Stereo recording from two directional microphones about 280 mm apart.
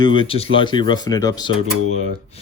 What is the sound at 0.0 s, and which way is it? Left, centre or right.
Speech, centre.